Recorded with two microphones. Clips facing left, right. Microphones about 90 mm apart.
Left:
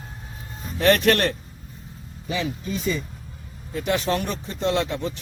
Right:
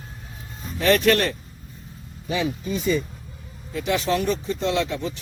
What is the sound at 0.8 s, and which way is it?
Speech, 50° left (ahead or behind).